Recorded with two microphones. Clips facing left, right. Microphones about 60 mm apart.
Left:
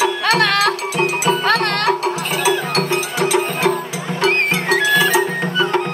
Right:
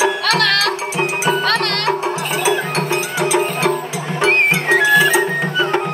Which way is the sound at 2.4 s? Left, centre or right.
Centre.